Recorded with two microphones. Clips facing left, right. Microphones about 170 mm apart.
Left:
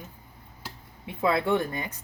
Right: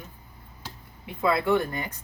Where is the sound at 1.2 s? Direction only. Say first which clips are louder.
Right 1 dB; 25° left (ahead or behind).